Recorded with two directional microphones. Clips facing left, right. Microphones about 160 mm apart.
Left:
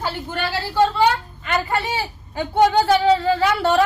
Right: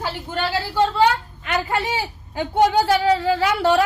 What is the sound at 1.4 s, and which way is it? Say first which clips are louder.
A woman's voice: even; 15° right (ahead or behind).